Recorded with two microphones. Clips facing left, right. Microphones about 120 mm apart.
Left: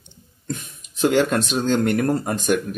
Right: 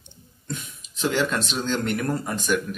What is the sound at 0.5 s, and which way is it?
Speech, 50° left (ahead or behind).